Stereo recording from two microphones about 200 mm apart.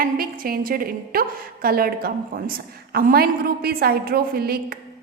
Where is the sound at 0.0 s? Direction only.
45° right (ahead or behind).